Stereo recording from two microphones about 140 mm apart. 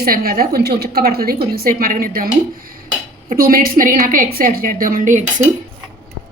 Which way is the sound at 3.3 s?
90° right.